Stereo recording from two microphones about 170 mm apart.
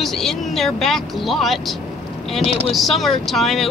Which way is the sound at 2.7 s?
Centre (ahead or behind).